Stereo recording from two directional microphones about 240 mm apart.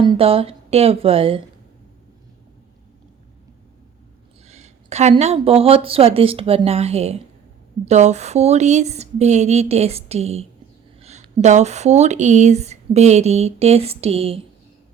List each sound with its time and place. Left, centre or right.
0.0 s speech: right
4.4 s speech: right